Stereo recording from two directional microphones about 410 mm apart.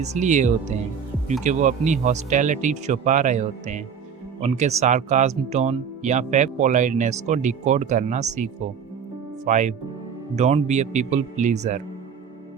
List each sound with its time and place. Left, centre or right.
0.0 s speech: centre